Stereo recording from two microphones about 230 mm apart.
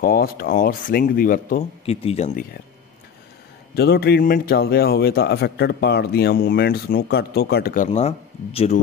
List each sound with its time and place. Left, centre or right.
0.0 s speech: left
1.9 s speech: left
3.7 s a man's voice: left